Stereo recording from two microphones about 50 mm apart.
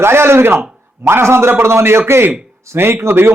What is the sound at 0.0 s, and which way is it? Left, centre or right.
A man's voice, right.